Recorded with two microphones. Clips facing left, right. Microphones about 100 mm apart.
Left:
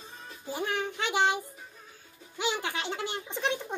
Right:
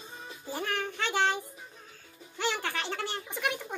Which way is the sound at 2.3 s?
15° left (ahead or behind).